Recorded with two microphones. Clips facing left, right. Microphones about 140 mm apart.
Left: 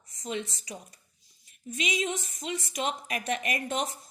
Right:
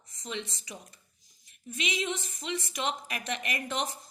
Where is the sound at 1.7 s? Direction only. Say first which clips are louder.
Left 2 dB; 45° left (ahead or behind).